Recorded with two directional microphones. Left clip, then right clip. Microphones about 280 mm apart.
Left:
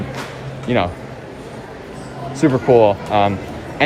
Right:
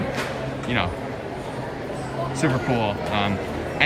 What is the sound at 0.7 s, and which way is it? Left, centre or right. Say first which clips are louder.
Speech: left 7 dB; centre.